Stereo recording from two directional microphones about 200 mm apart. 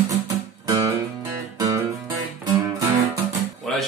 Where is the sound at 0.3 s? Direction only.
15° right (ahead or behind).